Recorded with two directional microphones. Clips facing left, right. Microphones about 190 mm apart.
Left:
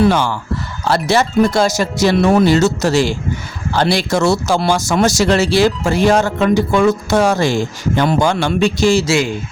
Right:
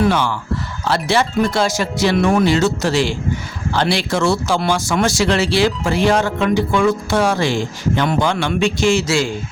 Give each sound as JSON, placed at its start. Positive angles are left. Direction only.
{"t": 0.0, "sound": "speech", "side_deg": 40}